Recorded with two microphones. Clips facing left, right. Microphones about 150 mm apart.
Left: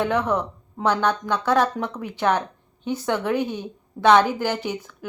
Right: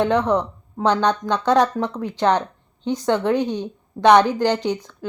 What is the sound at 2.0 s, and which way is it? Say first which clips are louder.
A woman's voice: right 3 dB; 10° left (ahead or behind).